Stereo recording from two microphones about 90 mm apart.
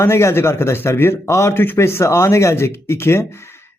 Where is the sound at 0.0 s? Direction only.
30° left (ahead or behind).